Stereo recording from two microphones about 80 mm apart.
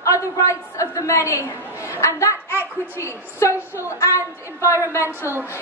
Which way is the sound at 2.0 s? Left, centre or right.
Left.